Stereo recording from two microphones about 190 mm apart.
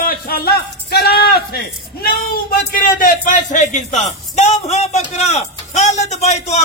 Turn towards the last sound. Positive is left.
turn(degrees=35)  # may be behind; listen again after turning